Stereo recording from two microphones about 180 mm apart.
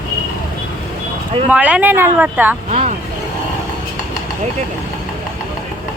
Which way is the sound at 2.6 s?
40° right (ahead or behind).